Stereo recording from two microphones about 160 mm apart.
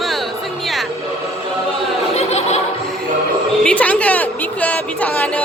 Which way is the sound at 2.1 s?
40° left (ahead or behind).